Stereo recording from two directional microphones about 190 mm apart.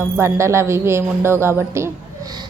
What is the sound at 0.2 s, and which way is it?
A woman's voice, 15° right (ahead or behind).